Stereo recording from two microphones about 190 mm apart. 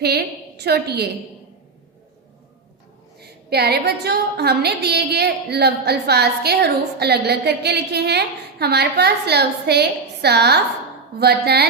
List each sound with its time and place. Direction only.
0.0 s a woman's voice: 60° right (ahead or behind)
3.2 s a woman's voice: 55° right (ahead or behind)